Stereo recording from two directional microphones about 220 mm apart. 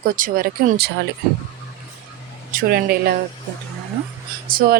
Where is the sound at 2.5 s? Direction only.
45° right (ahead or behind).